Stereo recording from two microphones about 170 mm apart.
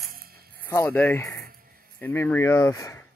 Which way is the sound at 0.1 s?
65° right (ahead or behind).